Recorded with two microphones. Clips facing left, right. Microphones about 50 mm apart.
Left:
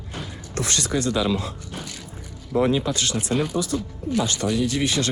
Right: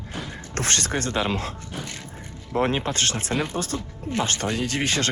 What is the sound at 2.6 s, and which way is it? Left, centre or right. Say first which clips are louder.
Speech: left 2 dB; right.